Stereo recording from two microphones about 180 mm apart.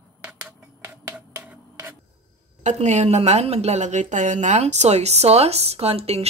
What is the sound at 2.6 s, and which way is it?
A woman's voice, 40° right (ahead or behind).